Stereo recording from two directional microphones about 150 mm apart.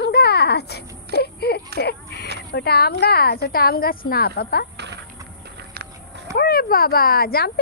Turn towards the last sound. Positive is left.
turn(degrees=90)